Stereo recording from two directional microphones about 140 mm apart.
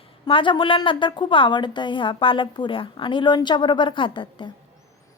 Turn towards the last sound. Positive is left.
turn(degrees=35)  # may be behind; listen again after turning